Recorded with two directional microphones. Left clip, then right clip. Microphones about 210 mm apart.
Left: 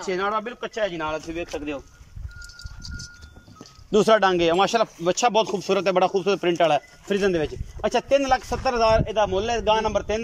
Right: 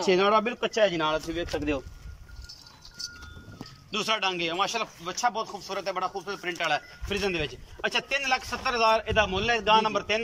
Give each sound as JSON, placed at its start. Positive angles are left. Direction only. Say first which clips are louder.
{"t": 0.0, "sound": "speech", "louder": "right 3 dB", "side_deg": -5}
{"t": 3.9, "sound": "speech", "louder": "left 10 dB", "side_deg": 35}
{"t": 6.6, "sound": "speech", "louder": "left 8 dB", "side_deg": 35}